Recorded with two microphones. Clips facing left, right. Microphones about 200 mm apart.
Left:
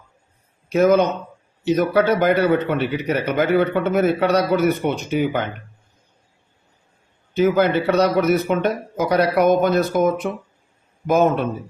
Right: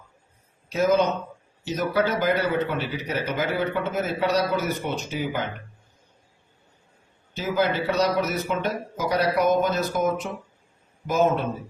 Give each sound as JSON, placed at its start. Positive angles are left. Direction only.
{"t": 0.7, "sound": "a man's voice", "side_deg": 60}
{"t": 7.3, "sound": "a man's voice", "side_deg": 60}